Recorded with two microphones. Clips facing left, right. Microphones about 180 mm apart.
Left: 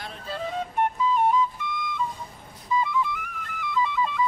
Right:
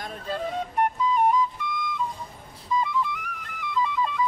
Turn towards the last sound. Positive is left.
turn(degrees=0)  # may be behind; listen again after turning